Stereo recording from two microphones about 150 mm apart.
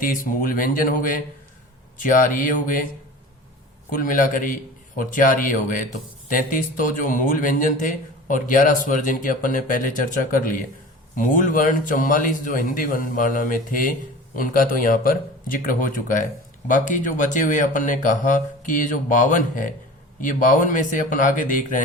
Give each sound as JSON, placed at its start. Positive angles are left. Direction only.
{"t": 0.0, "sound": "speech", "side_deg": 65}
{"t": 3.8, "sound": "speech", "side_deg": 65}